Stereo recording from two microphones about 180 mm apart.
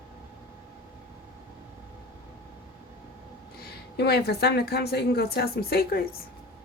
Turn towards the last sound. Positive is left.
turn(degrees=60)  # may be behind; listen again after turning